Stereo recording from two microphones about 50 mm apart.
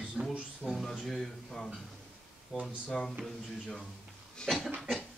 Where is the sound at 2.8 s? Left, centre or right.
Centre.